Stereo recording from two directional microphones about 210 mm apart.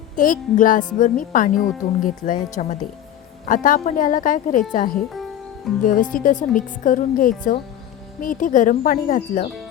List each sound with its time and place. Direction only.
0.2 s speech: 40° left (ahead or behind)